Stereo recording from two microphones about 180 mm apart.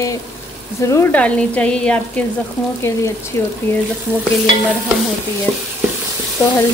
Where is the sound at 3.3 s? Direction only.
15° left (ahead or behind).